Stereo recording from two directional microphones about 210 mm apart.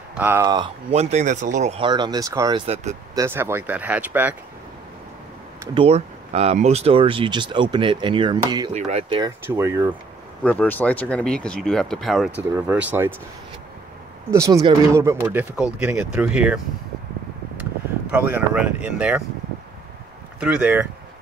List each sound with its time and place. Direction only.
0.2 s speech: 10° right (ahead or behind)
0.9 s speech: 35° right (ahead or behind)
3.2 s speech: 10° right (ahead or behind)
5.8 s speech: 30° right (ahead or behind)
8.7 s speech: 30° right (ahead or behind)
9.2 s speech: 15° right (ahead or behind)
10.4 s speech: 5° left (ahead or behind); by 13.1 s 10° right (ahead or behind)
14.3 s speech: 15° right (ahead or behind)
18.1 s speech: 10° right (ahead or behind)
20.3 s speech: 5° right (ahead or behind)